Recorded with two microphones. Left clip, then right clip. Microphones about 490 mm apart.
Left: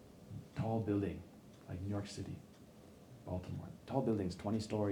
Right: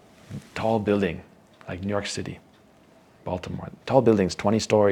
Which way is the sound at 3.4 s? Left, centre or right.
Right.